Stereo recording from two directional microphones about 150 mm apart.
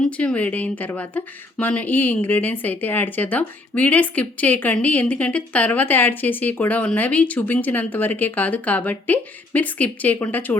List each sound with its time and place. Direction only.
0.0 s speech: 5° left (ahead or behind)